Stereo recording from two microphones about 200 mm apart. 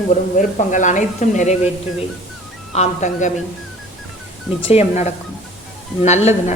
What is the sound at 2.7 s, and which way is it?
Speech, 35° left (ahead or behind).